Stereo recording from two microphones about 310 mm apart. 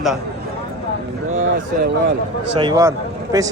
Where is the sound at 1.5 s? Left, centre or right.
Right.